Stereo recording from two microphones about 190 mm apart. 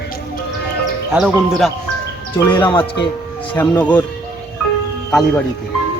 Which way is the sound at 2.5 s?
25° left (ahead or behind).